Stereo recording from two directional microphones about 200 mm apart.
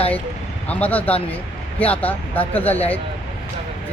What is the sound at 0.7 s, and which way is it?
Speech, 10° left (ahead or behind).